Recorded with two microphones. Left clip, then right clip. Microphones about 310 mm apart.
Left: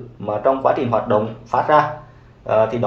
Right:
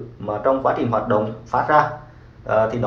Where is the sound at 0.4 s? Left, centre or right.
Left.